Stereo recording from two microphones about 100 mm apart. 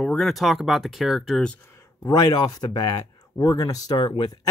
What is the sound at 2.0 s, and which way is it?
Speech, 40° left (ahead or behind).